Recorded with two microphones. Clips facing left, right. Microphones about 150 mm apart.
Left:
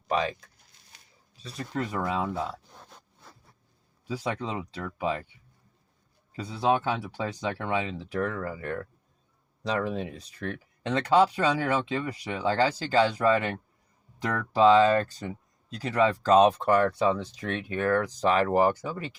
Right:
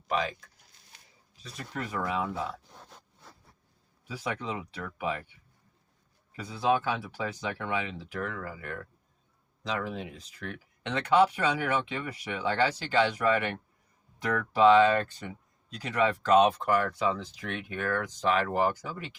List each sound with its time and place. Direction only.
1.4 s speech: 30° left (ahead or behind)
4.1 s speech: 30° left (ahead or behind)
6.3 s speech: 30° left (ahead or behind)